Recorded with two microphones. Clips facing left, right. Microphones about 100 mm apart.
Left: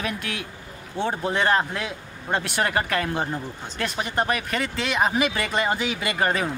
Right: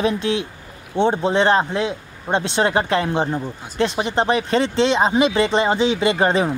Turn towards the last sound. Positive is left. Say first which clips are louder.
# right 7 dB
turn(degrees=-25)  # may be behind; listen again after turning